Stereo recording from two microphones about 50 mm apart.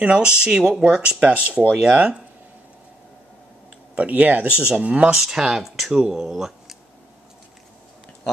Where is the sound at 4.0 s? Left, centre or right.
Right.